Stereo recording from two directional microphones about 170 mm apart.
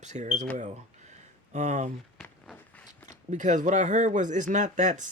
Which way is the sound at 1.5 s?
45° right (ahead or behind).